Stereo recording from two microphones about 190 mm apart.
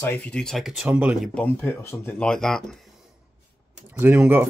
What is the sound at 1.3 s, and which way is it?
Speech, 10° left (ahead or behind).